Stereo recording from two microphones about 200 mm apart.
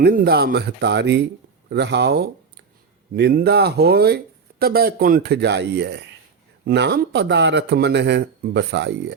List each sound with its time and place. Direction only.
0.0 s speech: 50° right (ahead or behind)